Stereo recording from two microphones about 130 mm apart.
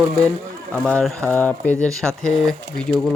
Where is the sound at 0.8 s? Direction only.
5° left (ahead or behind).